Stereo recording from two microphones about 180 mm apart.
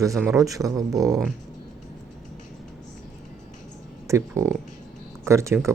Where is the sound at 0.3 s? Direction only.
20° right (ahead or behind).